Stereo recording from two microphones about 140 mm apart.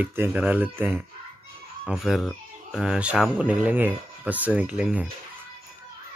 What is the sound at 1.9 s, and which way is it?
Speech, centre (ahead or behind).